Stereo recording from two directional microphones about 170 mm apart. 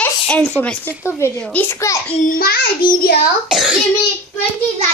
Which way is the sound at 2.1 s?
55° left (ahead or behind).